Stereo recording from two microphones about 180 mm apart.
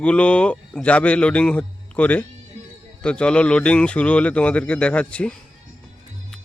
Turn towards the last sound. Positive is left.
turn(degrees=5)  # may be behind; listen again after turning